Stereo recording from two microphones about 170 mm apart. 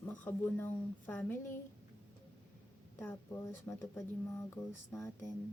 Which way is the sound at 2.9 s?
15° left (ahead or behind).